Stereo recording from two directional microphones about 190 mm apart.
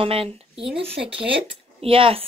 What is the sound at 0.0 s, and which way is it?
Speech, 30° right (ahead or behind).